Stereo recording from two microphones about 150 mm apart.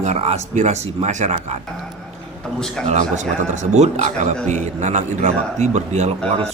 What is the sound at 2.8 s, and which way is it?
A man's voice, 55° right (ahead or behind).